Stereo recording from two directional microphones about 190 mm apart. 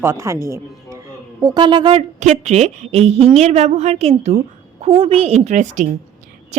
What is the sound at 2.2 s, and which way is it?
A woman's voice, 35° right (ahead or behind).